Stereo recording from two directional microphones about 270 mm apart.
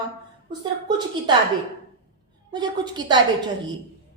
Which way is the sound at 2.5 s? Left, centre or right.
Centre.